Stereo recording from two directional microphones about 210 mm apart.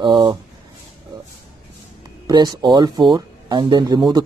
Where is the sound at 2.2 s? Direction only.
20° right (ahead or behind).